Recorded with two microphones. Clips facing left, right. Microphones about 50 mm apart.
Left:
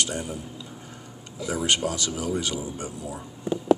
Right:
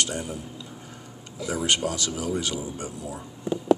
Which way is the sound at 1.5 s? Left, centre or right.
Centre.